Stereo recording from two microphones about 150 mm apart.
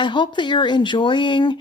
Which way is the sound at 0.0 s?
30° left (ahead or behind).